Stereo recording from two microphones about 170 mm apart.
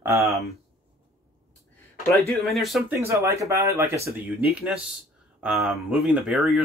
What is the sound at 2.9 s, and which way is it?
Speech, 15° right (ahead or behind).